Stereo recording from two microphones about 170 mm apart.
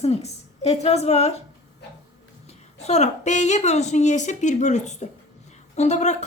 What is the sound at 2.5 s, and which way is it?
A woman's voice, 40° left (ahead or behind).